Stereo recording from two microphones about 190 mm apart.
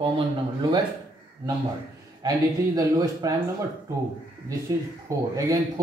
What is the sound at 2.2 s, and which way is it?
A man's voice, 20° right (ahead or behind).